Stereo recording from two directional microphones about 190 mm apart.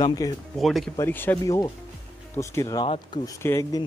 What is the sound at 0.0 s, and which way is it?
Speech, 20° left (ahead or behind).